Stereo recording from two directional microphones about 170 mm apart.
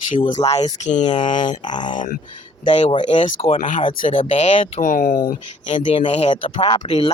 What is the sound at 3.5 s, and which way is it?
Speech, 50° left (ahead or behind).